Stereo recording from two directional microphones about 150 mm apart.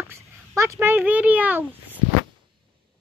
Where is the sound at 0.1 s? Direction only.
15° right (ahead or behind).